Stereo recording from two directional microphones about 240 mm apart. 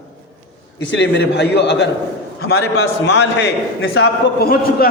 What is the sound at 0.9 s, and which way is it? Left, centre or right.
Speech, left.